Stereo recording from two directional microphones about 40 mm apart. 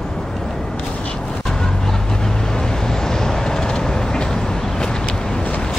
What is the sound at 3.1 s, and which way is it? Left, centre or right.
Vehicle, centre.